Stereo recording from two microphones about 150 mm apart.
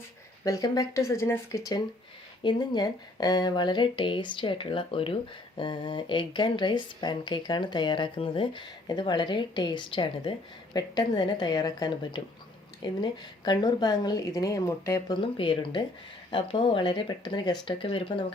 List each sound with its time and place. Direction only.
0.4 s a woman's voice: 25° left (ahead or behind)